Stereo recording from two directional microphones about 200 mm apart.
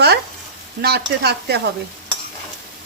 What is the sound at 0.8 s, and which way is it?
Speech, 55° right (ahead or behind).